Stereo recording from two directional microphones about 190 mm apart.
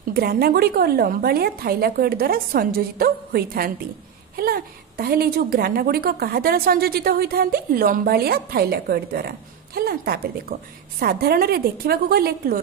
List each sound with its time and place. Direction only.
0.1 s a woman's voice: 50° right (ahead or behind)